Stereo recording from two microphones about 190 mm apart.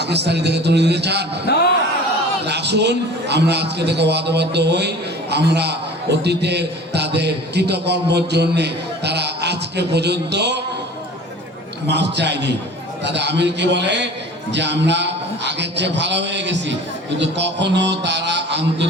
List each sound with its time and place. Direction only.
0.0 s a man's voice: 60° right (ahead or behind)
1.5 s a man's voice: 55° left (ahead or behind)
2.4 s a man's voice: 60° right (ahead or behind)
11.9 s a man's voice: 65° right (ahead or behind)